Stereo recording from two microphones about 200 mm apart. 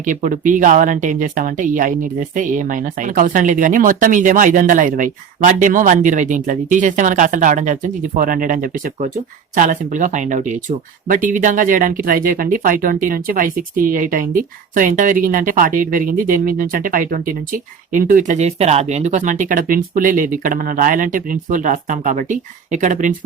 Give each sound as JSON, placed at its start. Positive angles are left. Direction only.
{"t": 0.0, "sound": "speech", "side_deg": -40}